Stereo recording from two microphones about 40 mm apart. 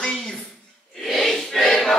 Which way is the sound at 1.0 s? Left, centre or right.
Centre.